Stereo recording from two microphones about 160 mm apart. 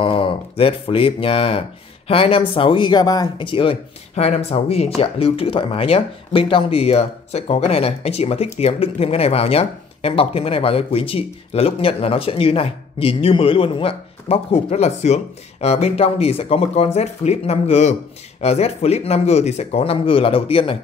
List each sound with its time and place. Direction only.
0.0 s speech: 30° left (ahead or behind)